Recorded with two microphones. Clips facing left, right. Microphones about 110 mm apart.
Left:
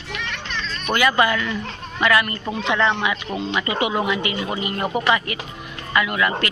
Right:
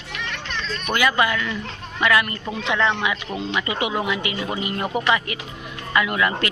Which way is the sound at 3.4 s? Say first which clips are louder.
Left 2 dB; 30° left (ahead or behind).